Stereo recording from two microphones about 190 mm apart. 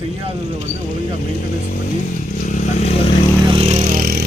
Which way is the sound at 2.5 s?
40° left (ahead or behind).